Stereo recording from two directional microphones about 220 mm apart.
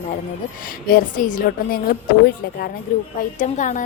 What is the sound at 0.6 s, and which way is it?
A woman's voice, 40° left (ahead or behind).